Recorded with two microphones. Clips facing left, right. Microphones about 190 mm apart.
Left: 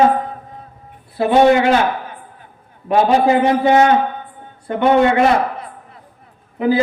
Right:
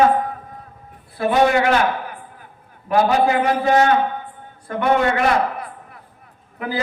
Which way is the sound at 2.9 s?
25° left (ahead or behind).